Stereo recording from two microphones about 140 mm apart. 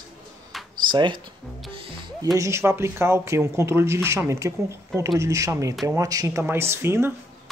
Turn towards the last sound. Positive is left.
turn(degrees=-20)  # may be behind; listen again after turning